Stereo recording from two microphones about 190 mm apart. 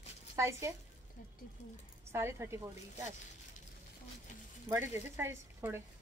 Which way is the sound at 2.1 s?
15° right (ahead or behind).